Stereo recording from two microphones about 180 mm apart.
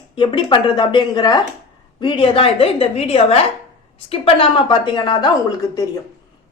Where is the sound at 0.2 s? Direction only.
25° left (ahead or behind).